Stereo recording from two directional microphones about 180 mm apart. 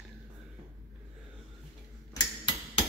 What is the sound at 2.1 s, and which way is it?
Tick-tock, 25° left (ahead or behind).